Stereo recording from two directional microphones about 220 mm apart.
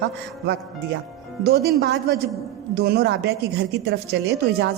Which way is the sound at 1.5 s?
45° right (ahead or behind).